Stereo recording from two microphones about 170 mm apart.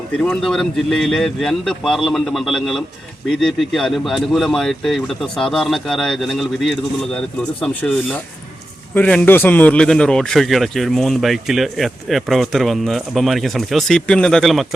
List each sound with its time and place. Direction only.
0.3 s a man's voice: 5° left (ahead or behind)